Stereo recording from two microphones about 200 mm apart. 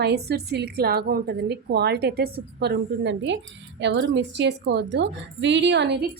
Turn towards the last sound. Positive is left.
turn(degrees=-60)  # may be behind; listen again after turning